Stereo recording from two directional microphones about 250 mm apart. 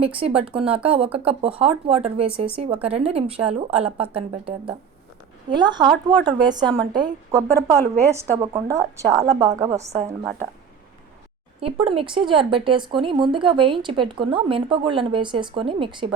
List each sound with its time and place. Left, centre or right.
0.2 s a woman's voice: right
9.6 s a woman's voice: right
11.6 s a woman's voice: right